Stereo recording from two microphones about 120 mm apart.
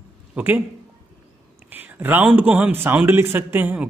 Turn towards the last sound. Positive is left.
turn(degrees=-15)  # may be behind; listen again after turning